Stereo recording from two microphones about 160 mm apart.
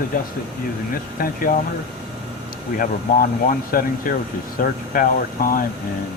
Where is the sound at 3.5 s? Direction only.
60° left (ahead or behind).